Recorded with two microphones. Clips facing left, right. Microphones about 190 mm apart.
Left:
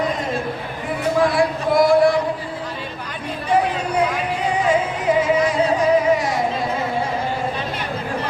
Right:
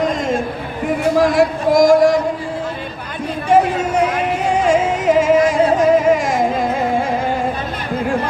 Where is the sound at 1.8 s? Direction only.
40° right (ahead or behind).